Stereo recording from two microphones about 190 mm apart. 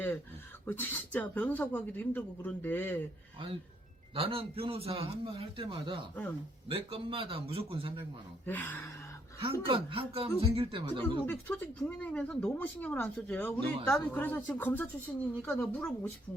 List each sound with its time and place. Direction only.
0.6 s speech: 10° left (ahead or behind)
4.1 s a man's voice: 30° right (ahead or behind)
8.4 s speech: 10° left (ahead or behind)
9.4 s a man's voice: 30° right (ahead or behind)
11.3 s speech: 10° left (ahead or behind)